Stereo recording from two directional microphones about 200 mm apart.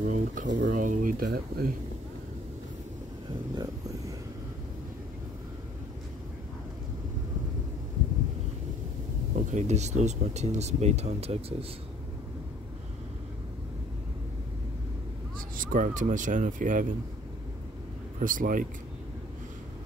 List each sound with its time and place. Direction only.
0.0 s speech: 40° right (ahead or behind)
9.3 s speech: 35° right (ahead or behind)
15.5 s speech: 45° right (ahead or behind)
18.2 s speech: 40° right (ahead or behind)